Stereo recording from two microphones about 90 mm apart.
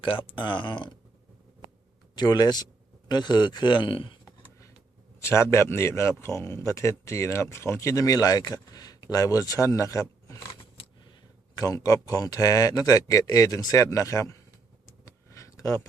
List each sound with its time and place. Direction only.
0.0 s speech: 70° left (ahead or behind)
2.1 s a man's voice: 50° left (ahead or behind); by 4.2 s 75° left (ahead or behind)
5.2 s a man's voice: 30° left (ahead or behind)
11.5 s a man's voice: 40° left (ahead or behind)
15.0 s a sound: 35° left (ahead or behind)